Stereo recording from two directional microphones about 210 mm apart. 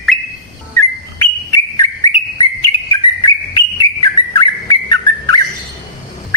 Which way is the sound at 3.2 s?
20° left (ahead or behind).